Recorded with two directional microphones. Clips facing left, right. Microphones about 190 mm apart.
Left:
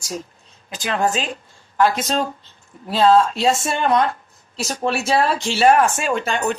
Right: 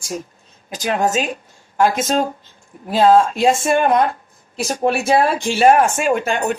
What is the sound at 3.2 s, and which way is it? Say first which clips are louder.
Speech: right 2 dB; 50° right (ahead or behind).